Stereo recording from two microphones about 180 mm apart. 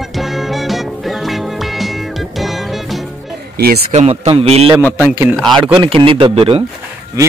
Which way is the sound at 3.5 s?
60° right (ahead or behind).